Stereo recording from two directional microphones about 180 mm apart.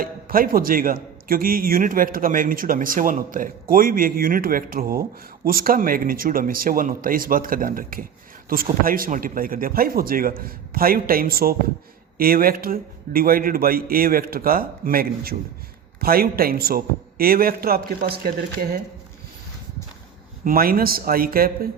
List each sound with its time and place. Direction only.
0.0 s a man's voice: 55° right (ahead or behind)
20.4 s a man's voice: 55° right (ahead or behind)